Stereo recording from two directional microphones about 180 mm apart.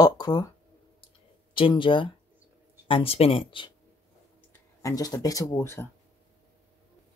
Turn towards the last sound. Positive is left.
turn(degrees=15)  # may be behind; listen again after turning